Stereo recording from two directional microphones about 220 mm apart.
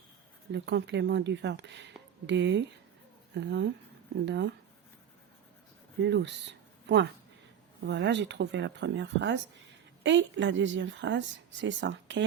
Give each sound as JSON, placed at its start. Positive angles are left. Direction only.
{"t": 0.5, "sound": "speech", "side_deg": -50}
{"t": 6.0, "sound": "a woman's voice", "side_deg": -50}